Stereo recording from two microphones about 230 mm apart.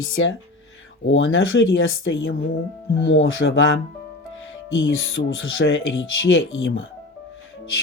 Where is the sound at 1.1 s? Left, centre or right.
Left.